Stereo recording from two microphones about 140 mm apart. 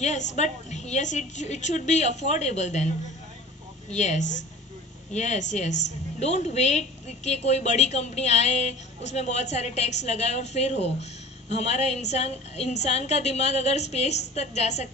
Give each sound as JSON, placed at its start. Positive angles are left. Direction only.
{"t": 0.0, "sound": "a woman's voice", "side_deg": 55}
{"t": 3.9, "sound": "a woman's voice", "side_deg": 55}